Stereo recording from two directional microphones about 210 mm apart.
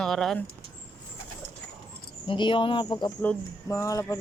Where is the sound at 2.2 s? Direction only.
25° left (ahead or behind).